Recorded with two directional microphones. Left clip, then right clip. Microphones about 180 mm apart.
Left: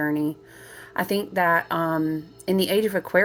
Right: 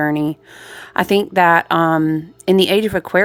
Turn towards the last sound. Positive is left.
turn(degrees=-30)  # may be behind; listen again after turning